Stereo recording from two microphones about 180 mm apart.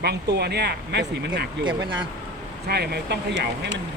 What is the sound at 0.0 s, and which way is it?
Speech, 65° right (ahead or behind).